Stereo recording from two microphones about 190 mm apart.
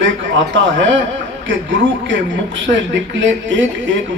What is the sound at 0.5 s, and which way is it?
Speech, 75° right (ahead or behind).